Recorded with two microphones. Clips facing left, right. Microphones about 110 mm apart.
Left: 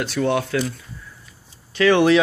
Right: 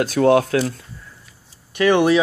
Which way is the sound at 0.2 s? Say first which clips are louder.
Right 6 dB; 55° right (ahead or behind).